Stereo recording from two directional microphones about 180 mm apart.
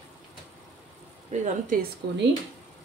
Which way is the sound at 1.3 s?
40° right (ahead or behind).